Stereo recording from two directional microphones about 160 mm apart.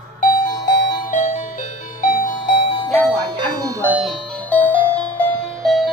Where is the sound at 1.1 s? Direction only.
50° left (ahead or behind).